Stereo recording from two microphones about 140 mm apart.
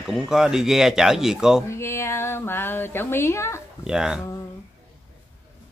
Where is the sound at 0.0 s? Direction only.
5° right (ahead or behind).